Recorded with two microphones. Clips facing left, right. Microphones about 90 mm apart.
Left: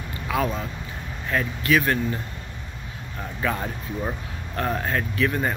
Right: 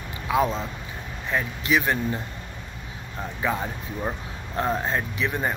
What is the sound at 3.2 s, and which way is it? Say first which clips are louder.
Speech: even; 15° right (ahead or behind).